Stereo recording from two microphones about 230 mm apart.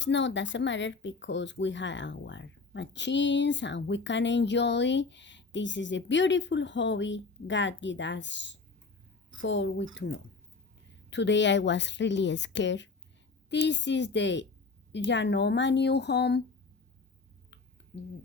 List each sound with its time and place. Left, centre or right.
0.0 s speech: left